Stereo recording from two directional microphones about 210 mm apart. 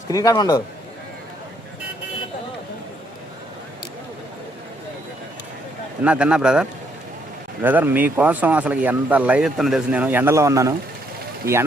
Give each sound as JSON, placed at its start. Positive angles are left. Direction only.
{"t": 0.1, "sound": "a man's voice", "side_deg": 15}
{"t": 6.0, "sound": "speech", "side_deg": -5}